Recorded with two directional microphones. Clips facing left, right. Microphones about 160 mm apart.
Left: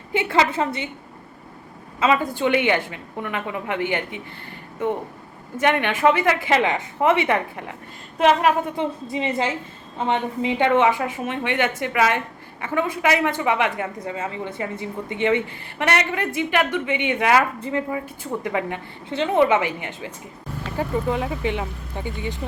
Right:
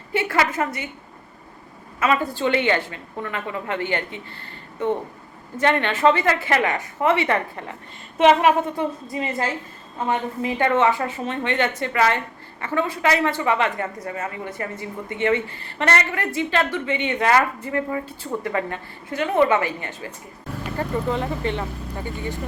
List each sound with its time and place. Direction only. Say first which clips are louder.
0.1 s a sound: left 2 dB; 20° left (ahead or behind)
0.5 s a woman's voice: left 1 dB; 25° left (ahead or behind)
2.0 s a woman's voice: left 1 dB; 15° left (ahead or behind)
5.5 s a woman's voice: even; 15° left (ahead or behind)
8.2 s speech: right 2 dB; centre (ahead or behind)
8.7 s a woman's voice: left 1 dB; 20° left (ahead or behind)